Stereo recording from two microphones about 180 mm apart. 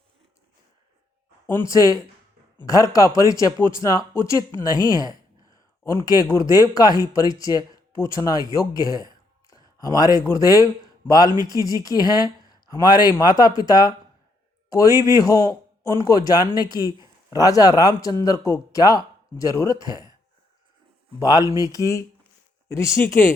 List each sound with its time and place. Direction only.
1.5 s speech: 15° left (ahead or behind)
21.2 s speech: 20° left (ahead or behind)